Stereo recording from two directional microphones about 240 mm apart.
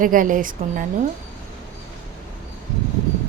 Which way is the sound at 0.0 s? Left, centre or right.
Right.